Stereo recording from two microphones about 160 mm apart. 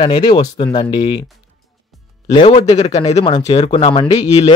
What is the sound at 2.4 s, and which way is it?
A man's voice, 40° left (ahead or behind).